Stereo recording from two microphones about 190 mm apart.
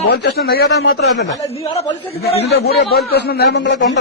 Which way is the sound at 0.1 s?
55° left (ahead or behind).